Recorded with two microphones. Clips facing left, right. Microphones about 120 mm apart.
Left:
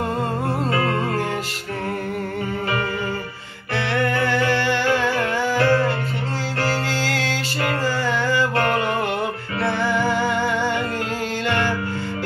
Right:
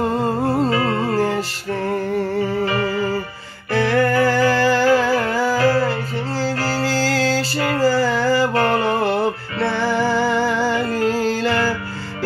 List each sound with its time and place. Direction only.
0.8 s music: 35° right (ahead or behind)
3.7 s music: 40° right (ahead or behind)